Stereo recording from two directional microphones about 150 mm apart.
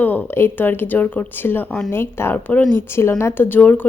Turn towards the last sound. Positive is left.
turn(degrees=10)  # may be behind; listen again after turning